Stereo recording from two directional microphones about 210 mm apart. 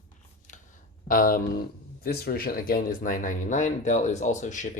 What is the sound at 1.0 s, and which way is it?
Speech, 40° left (ahead or behind).